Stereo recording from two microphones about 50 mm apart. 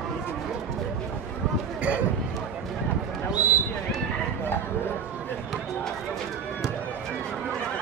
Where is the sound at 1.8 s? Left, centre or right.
Right.